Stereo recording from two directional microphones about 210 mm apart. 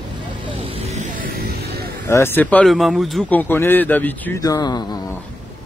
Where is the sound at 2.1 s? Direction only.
10° left (ahead or behind).